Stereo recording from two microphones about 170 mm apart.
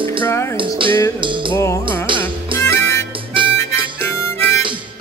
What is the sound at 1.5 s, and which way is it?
Music, 15° left (ahead or behind).